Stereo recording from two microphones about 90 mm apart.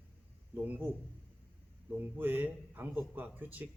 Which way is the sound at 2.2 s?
20° right (ahead or behind).